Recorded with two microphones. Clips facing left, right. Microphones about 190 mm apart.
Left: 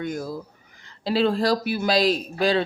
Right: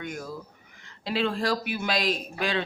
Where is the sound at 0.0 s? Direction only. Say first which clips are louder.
Left 6 dB; 35° left (ahead or behind).